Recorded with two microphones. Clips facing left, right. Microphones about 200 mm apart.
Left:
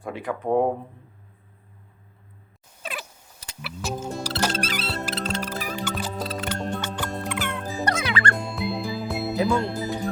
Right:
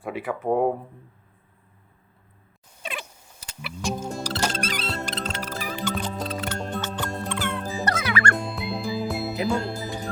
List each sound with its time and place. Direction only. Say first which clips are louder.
0.0 s speech: right 1 dB; 5° right (ahead or behind)
2.8 s a sound: even; 5° left (ahead or behind)
3.8 s music: right 1 dB; 5° left (ahead or behind)
7.6 s music: left 1 dB; centre (ahead or behind)